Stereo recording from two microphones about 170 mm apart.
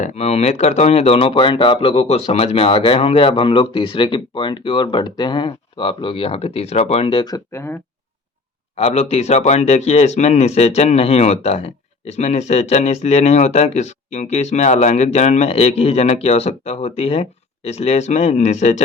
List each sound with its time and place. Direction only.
0.0 s speech: 40° left (ahead or behind); by 7.8 s 15° left (ahead or behind)
8.7 s speech: 35° left (ahead or behind)